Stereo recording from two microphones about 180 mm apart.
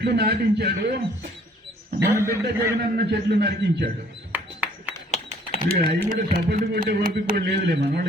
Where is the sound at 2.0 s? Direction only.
15° right (ahead or behind).